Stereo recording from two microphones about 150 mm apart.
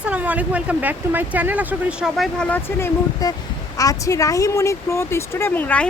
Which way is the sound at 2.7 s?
20° left (ahead or behind).